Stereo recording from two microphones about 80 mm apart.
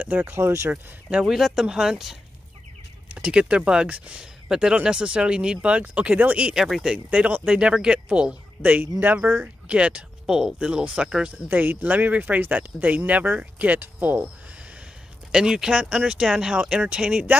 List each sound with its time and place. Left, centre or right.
0.0 s speech: right
1.1 s speech: centre
11.4 s speech: right
15.3 s speech: centre